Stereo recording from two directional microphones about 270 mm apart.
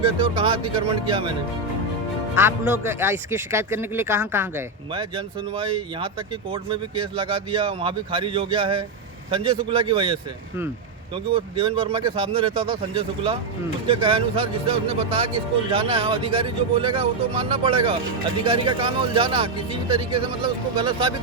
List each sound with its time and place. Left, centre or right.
0.0 s speech: centre
2.3 s speech: centre
20.7 s speech: centre